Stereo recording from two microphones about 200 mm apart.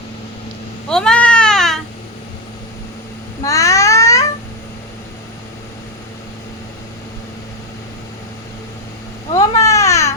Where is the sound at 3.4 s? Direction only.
15° left (ahead or behind).